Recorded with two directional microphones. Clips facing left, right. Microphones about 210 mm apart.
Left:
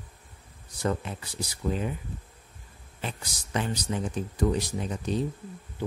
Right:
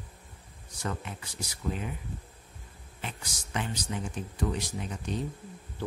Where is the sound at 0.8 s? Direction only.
35° left (ahead or behind).